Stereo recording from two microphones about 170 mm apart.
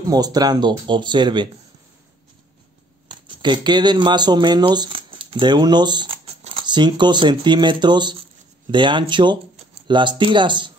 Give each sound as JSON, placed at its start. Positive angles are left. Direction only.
{"t": 0.0, "sound": "speech", "side_deg": -20}
{"t": 3.1, "sound": "speech", "side_deg": -25}